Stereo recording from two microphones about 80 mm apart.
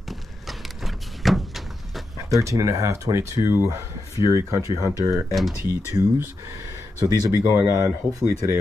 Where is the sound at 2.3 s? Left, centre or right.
Right.